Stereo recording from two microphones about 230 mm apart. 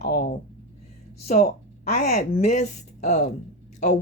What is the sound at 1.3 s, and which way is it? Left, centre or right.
Speech, left.